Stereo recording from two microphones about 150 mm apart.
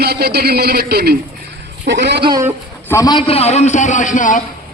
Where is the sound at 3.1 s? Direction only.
40° left (ahead or behind); by 4.4 s 60° left (ahead or behind).